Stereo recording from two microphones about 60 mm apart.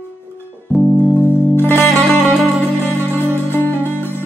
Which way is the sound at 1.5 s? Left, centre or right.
Left.